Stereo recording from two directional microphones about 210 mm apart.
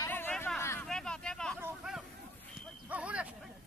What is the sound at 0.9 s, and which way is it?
Vehicle, 5° left (ahead or behind).